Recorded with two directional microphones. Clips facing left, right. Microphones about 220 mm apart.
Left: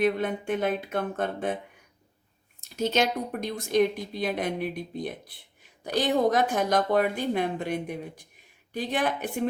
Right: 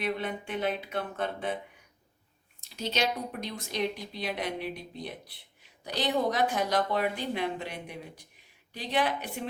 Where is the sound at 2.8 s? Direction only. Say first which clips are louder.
Left 5 dB; 50° left (ahead or behind).